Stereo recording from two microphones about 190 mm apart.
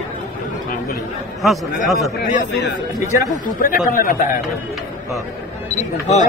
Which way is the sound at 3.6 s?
45° left (ahead or behind).